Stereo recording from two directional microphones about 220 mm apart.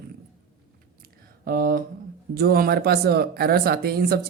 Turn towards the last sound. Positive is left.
turn(degrees=-45)  # may be behind; listen again after turning